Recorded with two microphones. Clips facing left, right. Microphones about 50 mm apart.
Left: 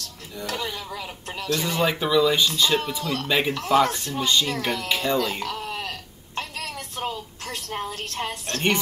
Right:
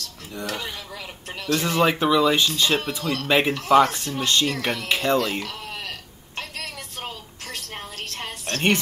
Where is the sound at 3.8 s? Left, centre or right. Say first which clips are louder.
Even; right.